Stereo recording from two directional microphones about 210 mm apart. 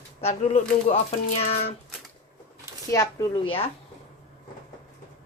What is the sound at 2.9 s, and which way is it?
Speech, 15° left (ahead or behind).